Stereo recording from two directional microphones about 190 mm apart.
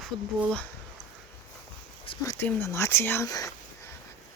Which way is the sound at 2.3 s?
10° left (ahead or behind).